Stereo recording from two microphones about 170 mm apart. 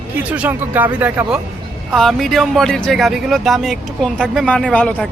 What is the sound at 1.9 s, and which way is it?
Speech, centre (ahead or behind).